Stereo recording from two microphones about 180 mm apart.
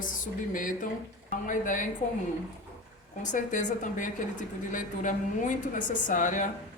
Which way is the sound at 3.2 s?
45° left (ahead or behind).